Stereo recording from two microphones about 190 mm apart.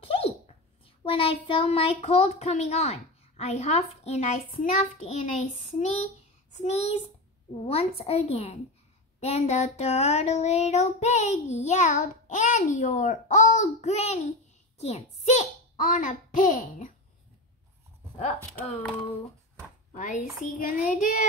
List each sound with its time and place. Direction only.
0.0 s dog: 30° left (ahead or behind)
1.0 s child singing: 30° left (ahead or behind)
6.5 s a child's voice: 35° left (ahead or behind)
7.6 s child singing: 30° left (ahead or behind)
14.8 s a child's voice: 35° left (ahead or behind)
20.0 s a child's voice: 45° left (ahead or behind)